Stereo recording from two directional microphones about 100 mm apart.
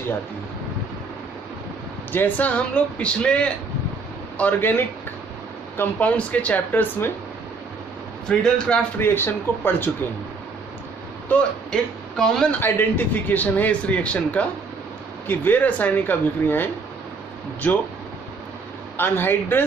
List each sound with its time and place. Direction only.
2.1 s speech: 20° left (ahead or behind)
8.3 s speech: 10° left (ahead or behind)
9.0 s speech: 20° left (ahead or behind)
11.3 s speech: 15° left (ahead or behind)
11.7 s speech: 5° left (ahead or behind)
12.5 s speech: 20° left (ahead or behind)
18.9 s speech: 20° left (ahead or behind)